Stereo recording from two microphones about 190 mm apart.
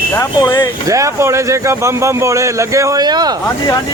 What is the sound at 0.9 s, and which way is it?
Speech, 15° right (ahead or behind).